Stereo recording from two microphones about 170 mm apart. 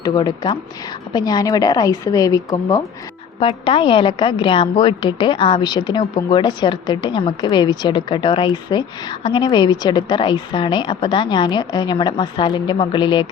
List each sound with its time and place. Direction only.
0.0 s a woman's voice: 25° left (ahead or behind)
3.4 s a woman's voice: 30° left (ahead or behind)